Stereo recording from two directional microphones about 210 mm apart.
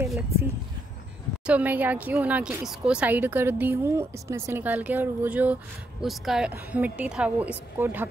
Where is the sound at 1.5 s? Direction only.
5° right (ahead or behind).